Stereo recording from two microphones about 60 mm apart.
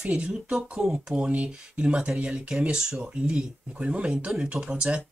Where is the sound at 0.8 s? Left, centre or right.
Centre.